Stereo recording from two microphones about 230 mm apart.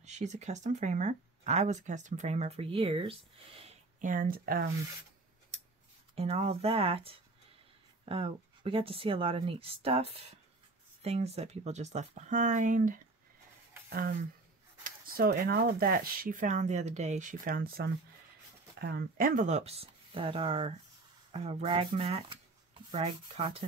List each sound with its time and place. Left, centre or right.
0.0 s speech: right
6.1 s speech: right